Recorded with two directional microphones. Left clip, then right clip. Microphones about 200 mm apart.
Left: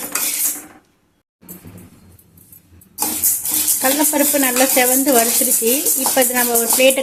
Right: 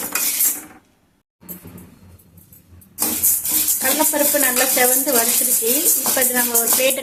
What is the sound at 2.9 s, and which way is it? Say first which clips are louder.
Music: left 1 dB; centre (ahead or behind).